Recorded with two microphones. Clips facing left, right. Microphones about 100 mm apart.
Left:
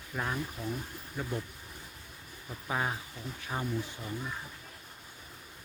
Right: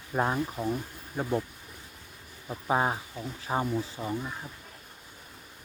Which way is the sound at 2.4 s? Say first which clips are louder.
Right 7 dB; 35° right (ahead or behind).